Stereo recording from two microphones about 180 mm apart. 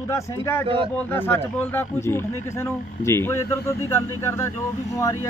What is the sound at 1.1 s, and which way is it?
Speech, 10° left (ahead or behind).